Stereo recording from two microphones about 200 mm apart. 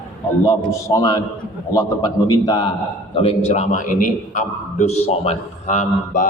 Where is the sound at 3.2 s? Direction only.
30° left (ahead or behind).